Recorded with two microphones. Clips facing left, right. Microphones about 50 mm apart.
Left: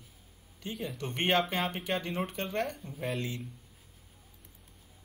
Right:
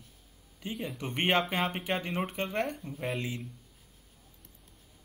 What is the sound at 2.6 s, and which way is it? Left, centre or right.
Speech, centre.